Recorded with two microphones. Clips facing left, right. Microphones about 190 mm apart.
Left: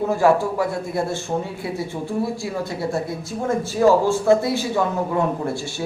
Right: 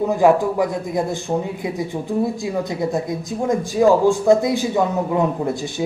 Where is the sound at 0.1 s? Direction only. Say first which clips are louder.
Right 2 dB; 15° right (ahead or behind).